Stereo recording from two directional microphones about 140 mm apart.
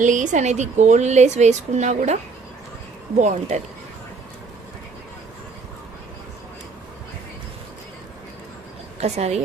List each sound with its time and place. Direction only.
0.0 s a woman's voice: 65° right (ahead or behind)
3.2 s a woman's voice: 60° right (ahead or behind)
9.0 s a woman's voice: 50° right (ahead or behind)